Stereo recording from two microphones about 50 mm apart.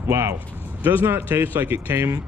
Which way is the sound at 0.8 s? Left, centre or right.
Right.